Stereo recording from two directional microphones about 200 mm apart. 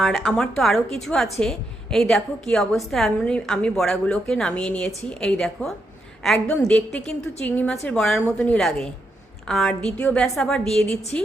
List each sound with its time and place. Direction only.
0.0 s a woman's voice: centre (ahead or behind)